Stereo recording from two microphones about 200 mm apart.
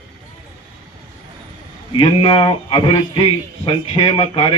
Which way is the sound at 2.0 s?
25° left (ahead or behind).